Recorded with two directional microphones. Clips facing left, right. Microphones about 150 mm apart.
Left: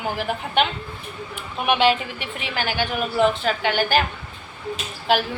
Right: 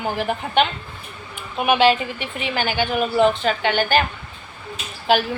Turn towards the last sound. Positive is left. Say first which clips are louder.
# right 2 dB
turn(degrees=0)  # may be behind; listen again after turning